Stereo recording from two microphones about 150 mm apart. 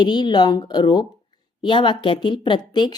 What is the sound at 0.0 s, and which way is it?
A woman's voice, 30° left (ahead or behind).